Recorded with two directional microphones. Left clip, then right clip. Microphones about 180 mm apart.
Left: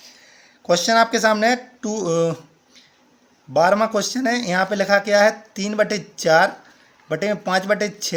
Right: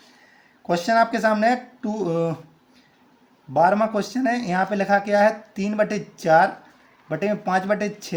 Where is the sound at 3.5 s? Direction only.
30° left (ahead or behind).